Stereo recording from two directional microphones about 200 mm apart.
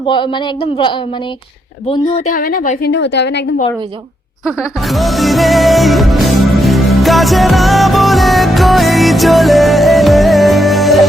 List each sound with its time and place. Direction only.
0.0 s speech: 25° left (ahead or behind)
2.3 s a woman's voice: 45° left (ahead or behind)
4.4 s music: centre (ahead or behind)